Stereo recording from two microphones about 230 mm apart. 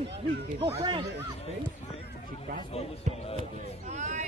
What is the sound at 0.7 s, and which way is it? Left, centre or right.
Speech, centre.